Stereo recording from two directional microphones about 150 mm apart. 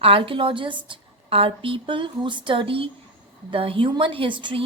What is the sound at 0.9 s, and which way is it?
A woman's voice, 35° right (ahead or behind).